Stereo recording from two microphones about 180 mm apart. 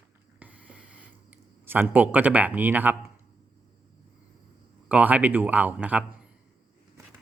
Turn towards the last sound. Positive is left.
turn(degrees=-10)  # may be behind; listen again after turning